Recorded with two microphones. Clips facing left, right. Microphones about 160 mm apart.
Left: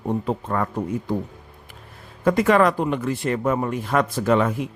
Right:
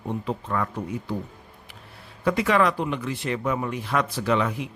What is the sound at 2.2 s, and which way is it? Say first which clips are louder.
Speech: left 4 dB; 45° left (ahead or behind).